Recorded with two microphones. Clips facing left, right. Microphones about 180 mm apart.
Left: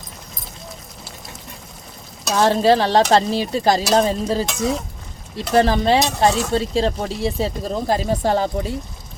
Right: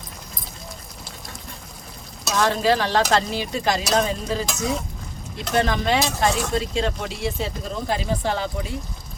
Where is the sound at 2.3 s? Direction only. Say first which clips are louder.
Left 5 dB; 35° left (ahead or behind).